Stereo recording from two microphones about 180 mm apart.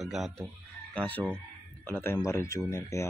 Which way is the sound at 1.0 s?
10° left (ahead or behind).